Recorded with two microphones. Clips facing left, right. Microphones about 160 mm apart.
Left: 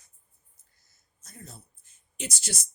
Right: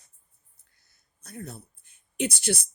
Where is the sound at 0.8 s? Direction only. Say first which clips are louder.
Right 8 dB; 60° right (ahead or behind).